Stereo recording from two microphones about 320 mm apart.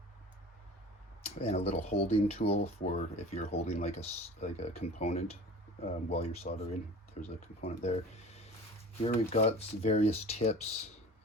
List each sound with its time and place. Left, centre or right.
1.2 s speech: centre